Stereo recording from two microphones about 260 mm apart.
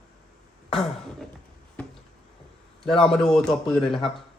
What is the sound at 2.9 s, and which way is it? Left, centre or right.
Speech, centre.